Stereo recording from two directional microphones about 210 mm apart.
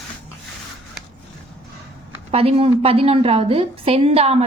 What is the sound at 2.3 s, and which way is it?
A woman's voice, 30° right (ahead or behind).